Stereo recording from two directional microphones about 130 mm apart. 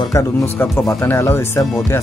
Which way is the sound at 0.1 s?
20° left (ahead or behind).